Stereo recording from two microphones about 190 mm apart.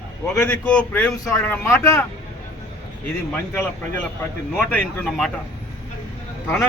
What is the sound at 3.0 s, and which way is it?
Speech, 5° left (ahead or behind).